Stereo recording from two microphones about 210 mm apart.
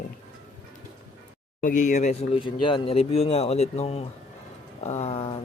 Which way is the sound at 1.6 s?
35° left (ahead or behind).